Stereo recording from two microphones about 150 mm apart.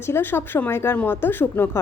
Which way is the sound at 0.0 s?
15° left (ahead or behind).